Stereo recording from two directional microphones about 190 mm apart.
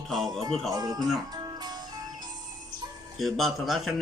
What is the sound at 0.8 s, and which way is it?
Speech, 20° right (ahead or behind).